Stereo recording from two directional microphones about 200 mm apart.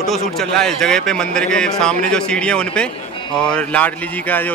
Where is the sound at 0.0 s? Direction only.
Centre (ahead or behind).